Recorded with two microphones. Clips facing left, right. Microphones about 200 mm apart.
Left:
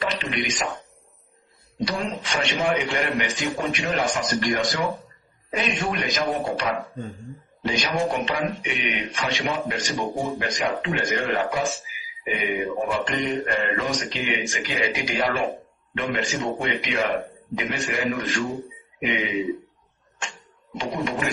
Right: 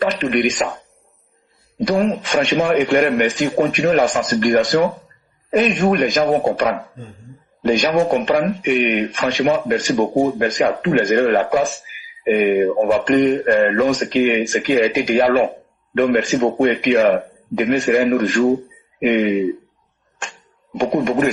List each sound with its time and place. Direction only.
0.0 s a sound: 50° right (ahead or behind)
1.8 s speech: 50° right (ahead or behind)
20.7 s speech: 50° right (ahead or behind)